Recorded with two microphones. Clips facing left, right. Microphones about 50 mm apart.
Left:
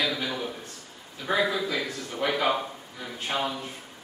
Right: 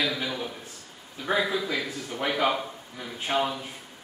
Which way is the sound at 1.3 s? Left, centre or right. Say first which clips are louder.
Even; centre.